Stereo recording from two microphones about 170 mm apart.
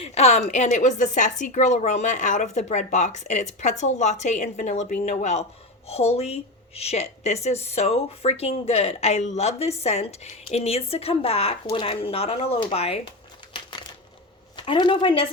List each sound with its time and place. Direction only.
0.0 s a woman's voice: 40° left (ahead or behind)
13.5 s crumpling: 30° left (ahead or behind)
14.5 s speech: 30° left (ahead or behind)